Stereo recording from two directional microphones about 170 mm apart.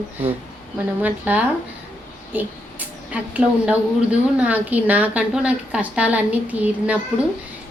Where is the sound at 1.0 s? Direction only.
10° right (ahead or behind).